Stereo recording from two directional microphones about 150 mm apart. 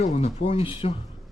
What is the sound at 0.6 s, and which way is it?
Speech, 35° left (ahead or behind).